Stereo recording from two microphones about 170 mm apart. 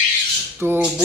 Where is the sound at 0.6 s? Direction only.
15° right (ahead or behind).